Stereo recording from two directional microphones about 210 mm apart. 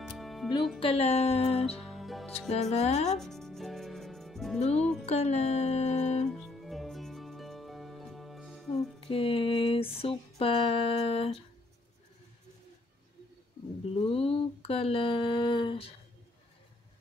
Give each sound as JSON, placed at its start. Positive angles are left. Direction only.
{"t": 0.0, "sound": "music", "side_deg": 0}
{"t": 0.7, "sound": "a sound", "side_deg": 30}
{"t": 1.9, "sound": "music", "side_deg": 0}
{"t": 2.7, "sound": "speech", "side_deg": 30}
{"t": 3.2, "sound": "music", "side_deg": 0}
{"t": 4.7, "sound": "speech", "side_deg": 5}
{"t": 5.0, "sound": "speech", "side_deg": 30}
{"t": 6.3, "sound": "music", "side_deg": 0}
{"t": 9.0, "sound": "a sound", "side_deg": 25}
{"t": 13.9, "sound": "a sound", "side_deg": 25}